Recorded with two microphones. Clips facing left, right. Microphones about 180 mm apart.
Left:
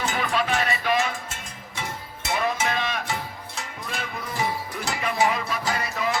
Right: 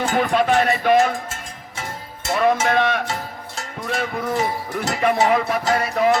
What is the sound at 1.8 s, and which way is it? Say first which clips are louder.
Music: right 2 dB; 50° right (ahead or behind).